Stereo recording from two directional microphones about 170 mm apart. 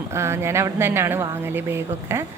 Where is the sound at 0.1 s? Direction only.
15° right (ahead or behind).